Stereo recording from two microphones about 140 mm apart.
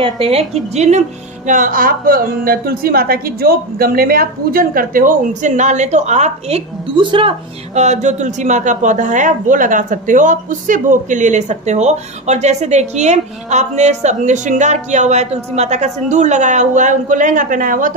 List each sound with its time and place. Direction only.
0.0 s a woman's voice: 45° right (ahead or behind)
7.0 s speech: 40° right (ahead or behind); by 17.9 s 70° right (ahead or behind)